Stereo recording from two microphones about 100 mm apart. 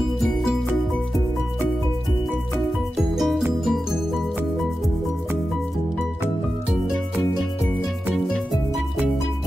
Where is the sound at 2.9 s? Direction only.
Centre (ahead or behind).